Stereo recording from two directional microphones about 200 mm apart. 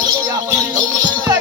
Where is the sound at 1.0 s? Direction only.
20° right (ahead or behind).